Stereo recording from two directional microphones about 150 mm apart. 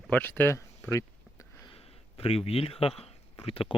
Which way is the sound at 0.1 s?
10° left (ahead or behind).